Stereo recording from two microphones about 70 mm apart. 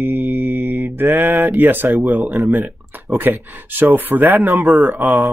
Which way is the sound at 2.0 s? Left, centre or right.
Right.